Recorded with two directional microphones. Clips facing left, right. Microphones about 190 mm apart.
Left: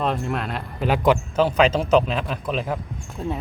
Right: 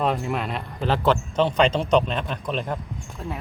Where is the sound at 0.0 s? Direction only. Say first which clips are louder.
Even; centre (ahead or behind).